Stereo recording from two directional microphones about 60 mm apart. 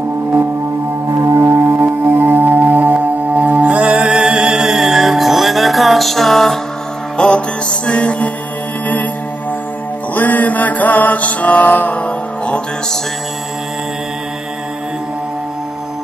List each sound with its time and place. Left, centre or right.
1.3 s music: right; by 8.3 s left
8.8 s mantra: left
10.1 s music: left